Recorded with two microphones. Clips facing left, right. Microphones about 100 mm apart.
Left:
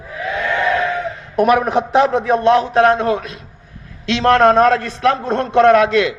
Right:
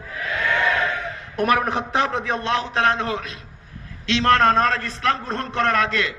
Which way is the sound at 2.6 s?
35° left (ahead or behind).